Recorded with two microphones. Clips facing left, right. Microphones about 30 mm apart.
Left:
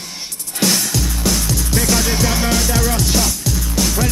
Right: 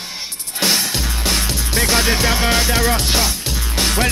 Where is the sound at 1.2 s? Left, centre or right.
Right.